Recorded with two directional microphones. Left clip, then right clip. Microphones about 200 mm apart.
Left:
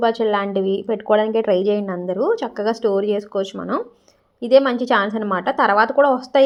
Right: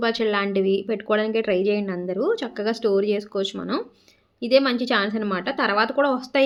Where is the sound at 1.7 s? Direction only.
20° right (ahead or behind).